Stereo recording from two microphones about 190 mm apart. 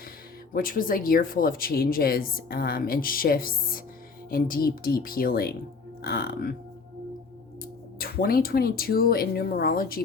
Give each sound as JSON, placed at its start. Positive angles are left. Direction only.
{"t": 0.5, "sound": "speech", "side_deg": 50}
{"t": 7.6, "sound": "speech", "side_deg": 50}